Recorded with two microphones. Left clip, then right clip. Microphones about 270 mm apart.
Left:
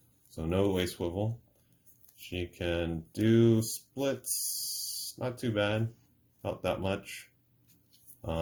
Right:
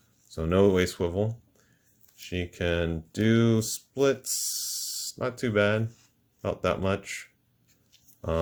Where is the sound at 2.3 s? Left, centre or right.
Right.